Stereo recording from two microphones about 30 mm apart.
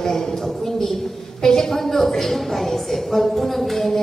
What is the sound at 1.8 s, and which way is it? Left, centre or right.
A woman's voice, centre.